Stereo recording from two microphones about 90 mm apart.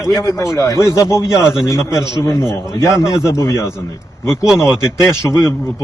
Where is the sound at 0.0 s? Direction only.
35° left (ahead or behind).